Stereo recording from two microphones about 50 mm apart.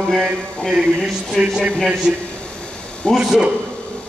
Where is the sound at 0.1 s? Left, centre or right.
Centre.